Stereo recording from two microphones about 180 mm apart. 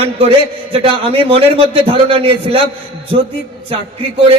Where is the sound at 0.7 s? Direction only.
30° right (ahead or behind).